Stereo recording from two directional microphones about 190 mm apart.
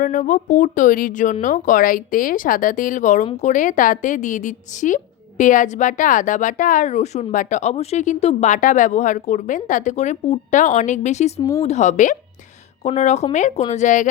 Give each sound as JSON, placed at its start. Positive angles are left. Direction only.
{"t": 0.0, "sound": "a woman's voice", "side_deg": 45}
{"t": 11.3, "sound": "speech", "side_deg": 15}
{"t": 11.6, "sound": "a woman's voice", "side_deg": 35}